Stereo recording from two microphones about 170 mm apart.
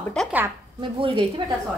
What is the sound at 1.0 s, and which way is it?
Speech, 30° right (ahead or behind).